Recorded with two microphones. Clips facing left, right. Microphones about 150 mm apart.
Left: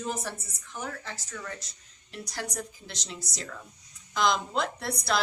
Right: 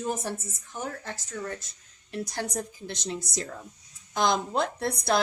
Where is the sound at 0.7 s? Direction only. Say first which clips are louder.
Right 2 dB; 45° right (ahead or behind).